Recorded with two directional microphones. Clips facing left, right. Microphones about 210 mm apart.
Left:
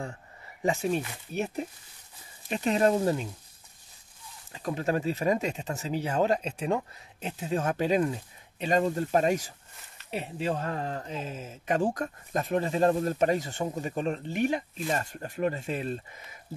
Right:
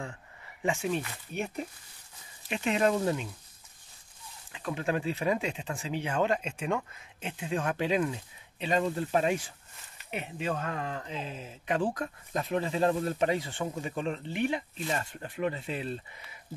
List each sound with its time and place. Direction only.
0.6 s speech: 40° left (ahead or behind)
2.5 s speech: 40° left (ahead or behind)
4.5 s speech: 40° left (ahead or behind)